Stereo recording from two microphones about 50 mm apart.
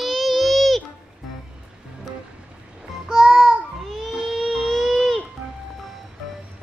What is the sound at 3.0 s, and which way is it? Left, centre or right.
Music, centre.